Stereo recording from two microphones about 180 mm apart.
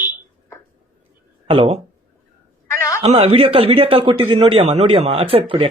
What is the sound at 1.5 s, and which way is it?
Speech, 30° right (ahead or behind).